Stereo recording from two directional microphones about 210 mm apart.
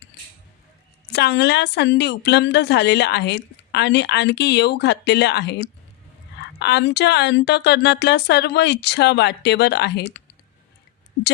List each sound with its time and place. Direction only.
1.1 s a woman's voice: 55° left (ahead or behind)